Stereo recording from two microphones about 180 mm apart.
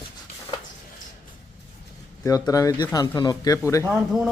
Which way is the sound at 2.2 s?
20° left (ahead or behind).